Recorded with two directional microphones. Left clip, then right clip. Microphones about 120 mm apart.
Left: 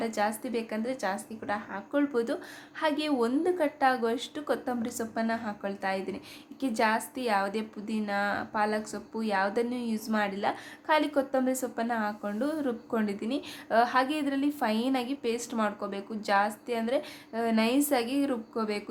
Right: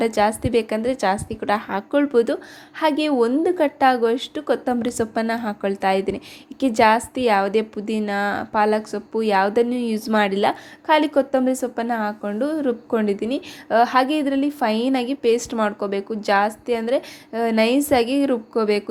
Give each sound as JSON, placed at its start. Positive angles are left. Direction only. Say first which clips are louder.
{"t": 0.0, "sound": "a woman's voice", "louder": "right 11 dB", "side_deg": -55}
{"t": 1.9, "sound": "a woman's voice", "louder": "right 10 dB", "side_deg": -45}
{"t": 10.5, "sound": "a woman's voice", "louder": "right 9 dB", "side_deg": -45}